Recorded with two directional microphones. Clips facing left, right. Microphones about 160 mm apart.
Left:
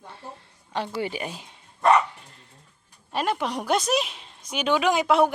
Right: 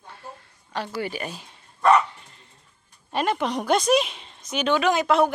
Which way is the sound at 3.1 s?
5° left (ahead or behind).